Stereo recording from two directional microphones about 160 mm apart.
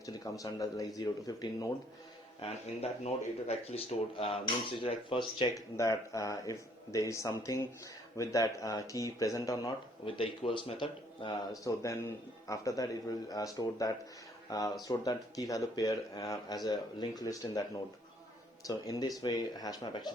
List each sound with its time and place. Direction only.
0.0 s a man's voice: 20° left (ahead or behind)
2.4 s speech: 40° left (ahead or behind)
5.7 s a man's voice: 20° left (ahead or behind)
10.1 s speech: 35° left (ahead or behind)
11.6 s a man's voice: 20° left (ahead or behind)
18.6 s a man's voice: 20° left (ahead or behind)